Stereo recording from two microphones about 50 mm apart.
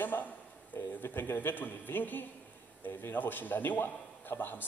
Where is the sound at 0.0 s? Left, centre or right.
Left.